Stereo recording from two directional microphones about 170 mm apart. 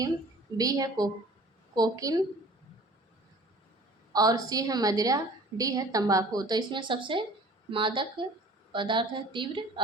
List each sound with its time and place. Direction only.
0.5 s a woman's voice: 20° right (ahead or behind)
4.1 s a woman's voice: 20° right (ahead or behind)